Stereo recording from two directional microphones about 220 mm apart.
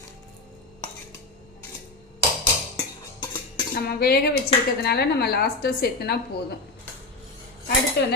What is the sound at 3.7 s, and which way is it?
A woman's voice, 45° left (ahead or behind).